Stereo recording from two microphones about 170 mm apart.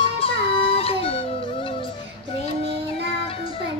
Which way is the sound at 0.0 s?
35° left (ahead or behind).